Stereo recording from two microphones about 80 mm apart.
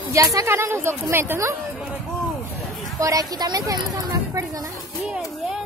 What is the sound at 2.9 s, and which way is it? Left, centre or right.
Speech, right.